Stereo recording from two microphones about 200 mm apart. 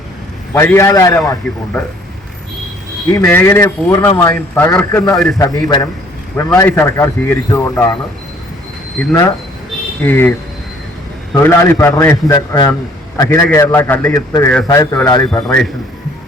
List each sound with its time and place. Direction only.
0.5 s speech: 15° left (ahead or behind)
3.1 s speech: 15° left (ahead or behind)
5.1 s a man's voice: centre (ahead or behind)
5.4 s speech: 15° left (ahead or behind)
10.0 s speech: 10° left (ahead or behind)
11.3 s a man's voice: 15° left (ahead or behind)
15.4 s a man's voice: 5° left (ahead or behind)